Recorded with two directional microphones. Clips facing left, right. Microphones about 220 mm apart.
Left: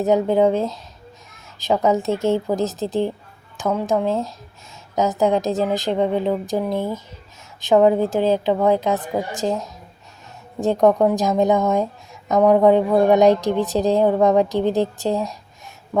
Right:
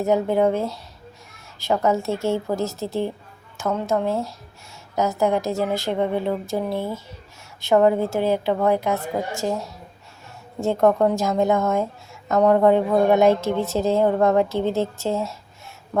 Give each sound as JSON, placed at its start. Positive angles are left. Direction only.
{"t": 0.0, "sound": "a woman's voice", "side_deg": 20}